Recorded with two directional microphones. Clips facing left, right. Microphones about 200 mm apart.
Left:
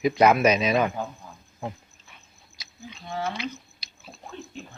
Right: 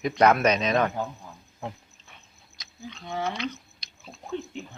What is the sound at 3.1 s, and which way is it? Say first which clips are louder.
Speech: even; 20° right (ahead or behind).